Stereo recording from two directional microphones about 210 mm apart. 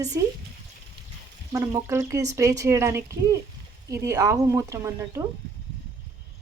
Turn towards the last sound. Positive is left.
turn(degrees=-15)  # may be behind; listen again after turning